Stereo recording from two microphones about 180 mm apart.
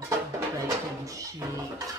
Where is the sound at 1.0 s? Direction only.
20° right (ahead or behind).